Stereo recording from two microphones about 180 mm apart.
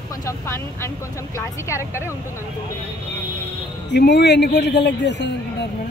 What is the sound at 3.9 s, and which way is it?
Speech, 70° left (ahead or behind).